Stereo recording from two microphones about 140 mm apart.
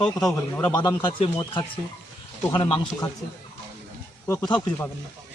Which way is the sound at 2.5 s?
30° left (ahead or behind).